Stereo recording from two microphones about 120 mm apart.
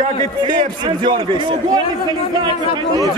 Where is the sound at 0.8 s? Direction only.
40° right (ahead or behind).